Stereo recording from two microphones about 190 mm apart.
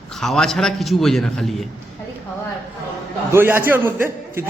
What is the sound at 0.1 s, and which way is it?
A man's voice, centre (ahead or behind).